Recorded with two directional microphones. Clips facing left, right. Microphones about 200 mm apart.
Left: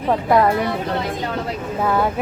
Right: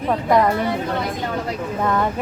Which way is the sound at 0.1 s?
5° left (ahead or behind).